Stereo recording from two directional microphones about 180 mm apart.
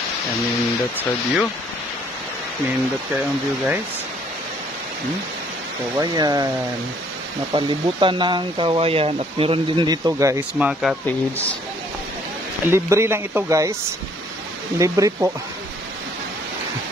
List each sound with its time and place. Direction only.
0.9 s speech: centre (ahead or behind)
3.2 s speech: 10° right (ahead or behind)
5.9 s speech: 20° right (ahead or behind)
7.5 s speech: 25° right (ahead or behind)
10.7 s speech: centre (ahead or behind)
11.1 s speech: 10° left (ahead or behind)
12.6 s speech: 15° right (ahead or behind)
14.8 s speech: 20° right (ahead or behind)